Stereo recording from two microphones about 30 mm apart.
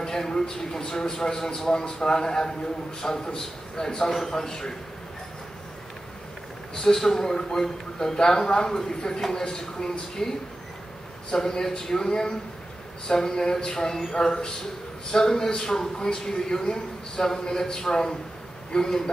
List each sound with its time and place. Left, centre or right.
0.0 s a man's voice: centre
1.7 s a man's voice: left
6.7 s a man's voice: centre
11.3 s a man's voice: centre